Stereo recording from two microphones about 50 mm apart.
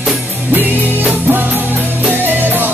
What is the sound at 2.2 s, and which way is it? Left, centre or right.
Music, right.